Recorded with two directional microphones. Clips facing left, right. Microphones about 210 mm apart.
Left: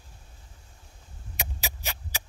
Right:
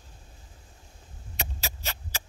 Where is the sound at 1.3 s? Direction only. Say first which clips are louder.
Even; 15° left (ahead or behind).